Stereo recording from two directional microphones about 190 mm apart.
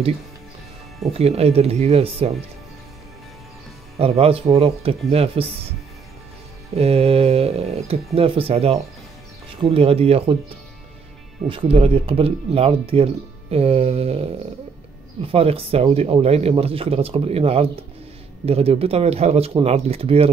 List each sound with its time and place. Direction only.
1.1 s speech: 30° right (ahead or behind)
3.9 s speech: 30° right (ahead or behind)
6.7 s speech: 30° right (ahead or behind)
11.4 s speech: 30° right (ahead or behind)
15.2 s speech: 30° right (ahead or behind)